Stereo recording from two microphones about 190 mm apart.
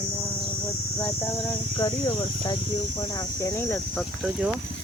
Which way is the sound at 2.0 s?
30° left (ahead or behind).